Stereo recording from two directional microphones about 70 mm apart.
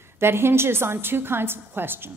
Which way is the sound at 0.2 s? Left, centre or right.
Right.